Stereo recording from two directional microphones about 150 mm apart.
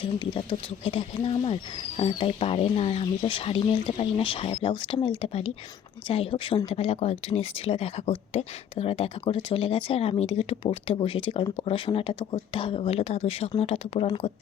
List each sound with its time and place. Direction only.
0.0 s speech: 35° left (ahead or behind)